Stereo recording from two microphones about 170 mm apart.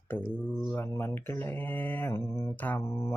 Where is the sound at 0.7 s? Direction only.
15° left (ahead or behind).